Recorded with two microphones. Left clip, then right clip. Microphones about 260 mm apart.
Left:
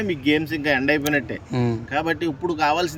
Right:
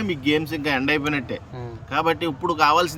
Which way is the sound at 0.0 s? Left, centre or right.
Centre.